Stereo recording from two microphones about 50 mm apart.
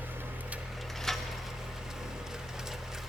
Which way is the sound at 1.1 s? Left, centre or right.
Centre.